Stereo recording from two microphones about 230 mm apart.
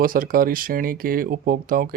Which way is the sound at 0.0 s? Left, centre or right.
Right.